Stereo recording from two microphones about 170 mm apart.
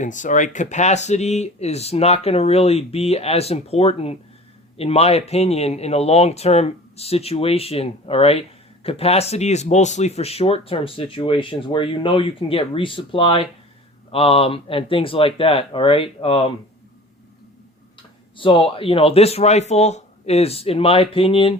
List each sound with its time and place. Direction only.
0.0 s speech: 45° left (ahead or behind); by 16.5 s 30° left (ahead or behind)
18.3 s speech: 30° left (ahead or behind)